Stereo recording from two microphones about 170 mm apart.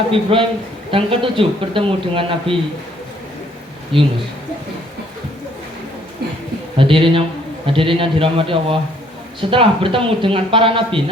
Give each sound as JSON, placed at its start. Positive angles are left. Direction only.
{"t": 0.1, "sound": "a man's voice", "side_deg": -35}
{"t": 6.7, "sound": "a man's voice", "side_deg": -30}